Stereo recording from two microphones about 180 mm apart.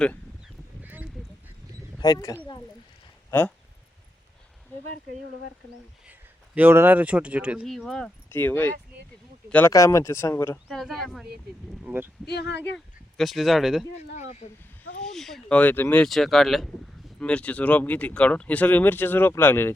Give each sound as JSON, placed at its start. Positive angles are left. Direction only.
{"t": 0.0, "sound": "honk", "side_deg": 5}
{"t": 0.8, "sound": "duck", "side_deg": -10}
{"t": 2.0, "sound": "speech", "side_deg": 20}
{"t": 6.1, "sound": "speech", "side_deg": -10}
{"t": 10.7, "sound": "speech", "side_deg": 0}
{"t": 11.9, "sound": "speech", "side_deg": -10}
{"t": 12.2, "sound": "speech", "side_deg": 70}
{"t": 12.7, "sound": "speech", "side_deg": 0}
{"t": 13.9, "sound": "speech", "side_deg": 40}
{"t": 15.0, "sound": "speech", "side_deg": 0}